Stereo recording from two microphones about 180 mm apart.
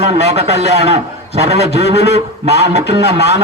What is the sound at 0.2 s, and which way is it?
A man's voice, 35° right (ahead or behind).